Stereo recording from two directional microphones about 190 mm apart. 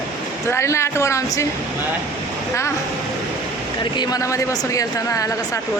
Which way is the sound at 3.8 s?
20° left (ahead or behind).